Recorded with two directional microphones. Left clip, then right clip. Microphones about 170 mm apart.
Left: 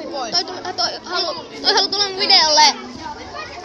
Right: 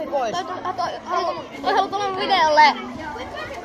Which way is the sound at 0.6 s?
25° left (ahead or behind).